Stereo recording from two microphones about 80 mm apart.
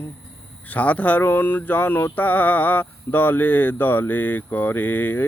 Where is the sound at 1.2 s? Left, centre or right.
Left.